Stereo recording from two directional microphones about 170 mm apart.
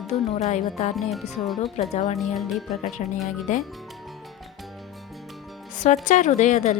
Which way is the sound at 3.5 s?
45° left (ahead or behind).